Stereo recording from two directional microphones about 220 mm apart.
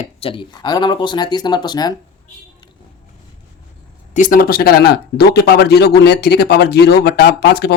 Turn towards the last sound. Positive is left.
turn(degrees=45)  # may be behind; listen again after turning